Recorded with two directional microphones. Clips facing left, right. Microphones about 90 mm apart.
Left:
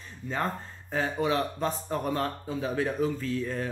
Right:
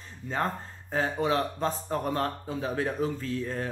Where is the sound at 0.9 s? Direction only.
35° right (ahead or behind).